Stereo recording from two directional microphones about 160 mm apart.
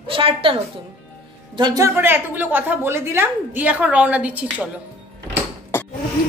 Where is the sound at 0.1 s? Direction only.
35° right (ahead or behind).